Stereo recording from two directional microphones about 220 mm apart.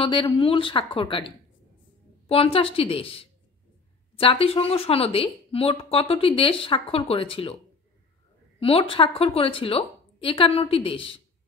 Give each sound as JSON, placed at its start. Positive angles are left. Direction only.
{"t": 0.0, "sound": "speech", "side_deg": 25}
{"t": 2.2, "sound": "speech", "side_deg": 25}
{"t": 8.5, "sound": "speech", "side_deg": 25}